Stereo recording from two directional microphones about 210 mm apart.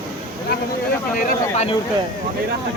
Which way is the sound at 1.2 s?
30° left (ahead or behind).